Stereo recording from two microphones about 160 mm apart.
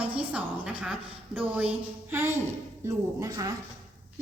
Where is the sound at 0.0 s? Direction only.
10° right (ahead or behind).